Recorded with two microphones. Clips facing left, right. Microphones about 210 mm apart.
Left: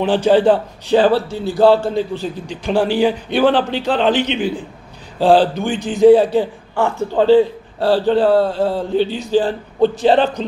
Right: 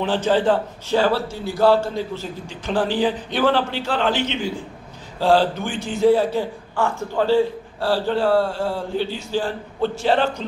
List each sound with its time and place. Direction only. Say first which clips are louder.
0.0 s a man's voice: left 6 dB; 15° left (ahead or behind)